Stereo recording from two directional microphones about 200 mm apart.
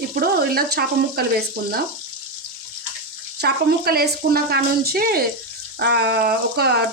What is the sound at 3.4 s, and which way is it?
Speech, 50° right (ahead or behind).